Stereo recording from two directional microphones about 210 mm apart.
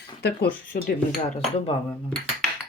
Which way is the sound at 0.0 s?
50° left (ahead or behind).